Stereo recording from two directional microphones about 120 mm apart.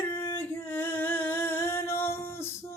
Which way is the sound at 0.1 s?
25° left (ahead or behind).